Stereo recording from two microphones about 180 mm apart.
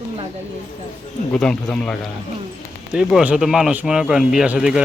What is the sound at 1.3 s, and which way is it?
Speech, 5° left (ahead or behind).